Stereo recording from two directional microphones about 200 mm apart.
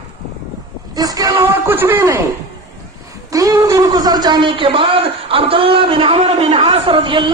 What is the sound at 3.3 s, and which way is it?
A man's voice, 15° right (ahead or behind).